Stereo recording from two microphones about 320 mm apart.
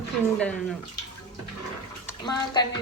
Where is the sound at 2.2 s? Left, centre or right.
Centre.